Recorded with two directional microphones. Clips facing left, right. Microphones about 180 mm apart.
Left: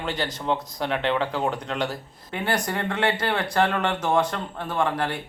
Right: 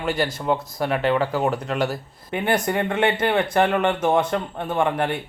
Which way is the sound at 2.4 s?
20° right (ahead or behind).